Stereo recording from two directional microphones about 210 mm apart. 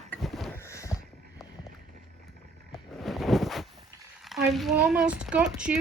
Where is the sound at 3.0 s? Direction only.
Centre (ahead or behind).